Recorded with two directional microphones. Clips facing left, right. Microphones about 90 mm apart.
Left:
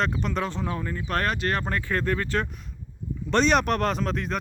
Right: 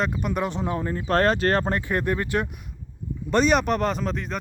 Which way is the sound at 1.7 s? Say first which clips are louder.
Right 2 dB; 15° right (ahead or behind).